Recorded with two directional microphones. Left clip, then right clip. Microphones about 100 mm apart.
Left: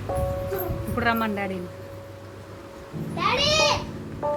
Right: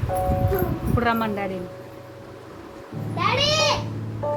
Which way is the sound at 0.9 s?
Centre (ahead or behind).